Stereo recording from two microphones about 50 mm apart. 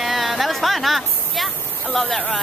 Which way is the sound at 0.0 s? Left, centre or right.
Centre.